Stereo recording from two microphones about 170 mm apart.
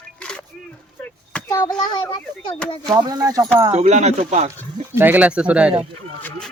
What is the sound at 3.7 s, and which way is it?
Speech, 40° right (ahead or behind).